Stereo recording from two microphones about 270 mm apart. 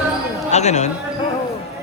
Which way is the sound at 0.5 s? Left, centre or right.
Left.